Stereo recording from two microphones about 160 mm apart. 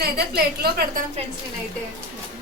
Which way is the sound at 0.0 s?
80° right.